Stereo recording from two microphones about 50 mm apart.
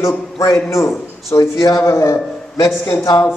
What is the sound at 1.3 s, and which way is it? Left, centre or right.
Speech, left.